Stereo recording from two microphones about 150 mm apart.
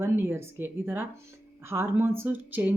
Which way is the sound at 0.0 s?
15° right (ahead or behind).